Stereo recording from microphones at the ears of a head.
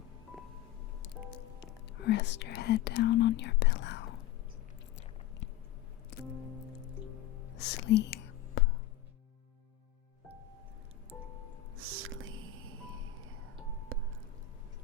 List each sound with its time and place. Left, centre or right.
2.0 s speech: left
7.5 s whispering: left
11.8 s a sound: right